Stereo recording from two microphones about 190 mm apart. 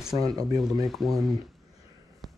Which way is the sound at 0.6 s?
Centre (ahead or behind).